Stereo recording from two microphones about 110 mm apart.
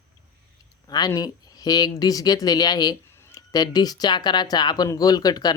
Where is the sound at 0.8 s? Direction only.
35° left (ahead or behind).